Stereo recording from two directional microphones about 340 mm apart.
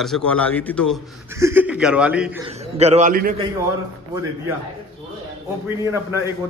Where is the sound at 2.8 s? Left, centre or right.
Centre.